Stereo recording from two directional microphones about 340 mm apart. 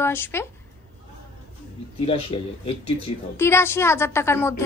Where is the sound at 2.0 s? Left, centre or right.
Centre.